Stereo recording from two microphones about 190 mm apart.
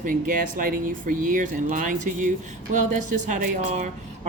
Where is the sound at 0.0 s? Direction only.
45° right (ahead or behind).